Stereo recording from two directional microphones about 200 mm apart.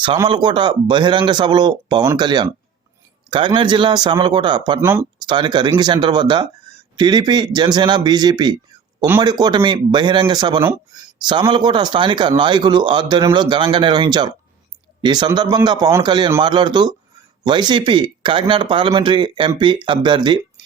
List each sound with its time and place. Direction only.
0.2 s speech: 20° right (ahead or behind)